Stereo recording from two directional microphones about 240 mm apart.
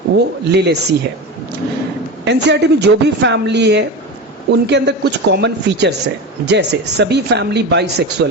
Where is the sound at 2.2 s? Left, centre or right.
Right.